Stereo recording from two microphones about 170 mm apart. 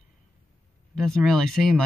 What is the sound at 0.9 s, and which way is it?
Speech, centre (ahead or behind).